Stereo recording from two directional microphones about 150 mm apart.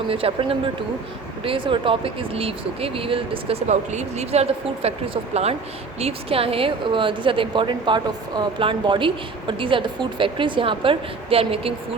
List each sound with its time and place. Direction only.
0.1 s a woman's voice: 40° right (ahead or behind)